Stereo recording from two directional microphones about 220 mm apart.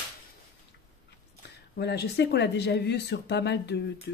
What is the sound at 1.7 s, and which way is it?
Speech, 50° left (ahead or behind).